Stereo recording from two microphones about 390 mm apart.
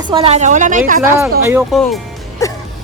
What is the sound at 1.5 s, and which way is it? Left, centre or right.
Speech, centre.